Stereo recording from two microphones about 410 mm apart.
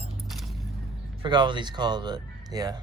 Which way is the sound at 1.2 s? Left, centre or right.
Centre.